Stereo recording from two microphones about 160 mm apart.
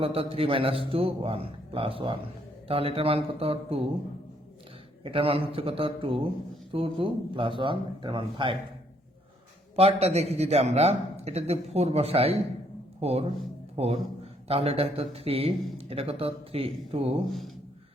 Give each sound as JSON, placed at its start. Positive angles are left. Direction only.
{"t": 0.0, "sound": "speech", "side_deg": -35}
{"t": 5.0, "sound": "speech", "side_deg": -35}
{"t": 9.7, "sound": "a man's voice", "side_deg": -40}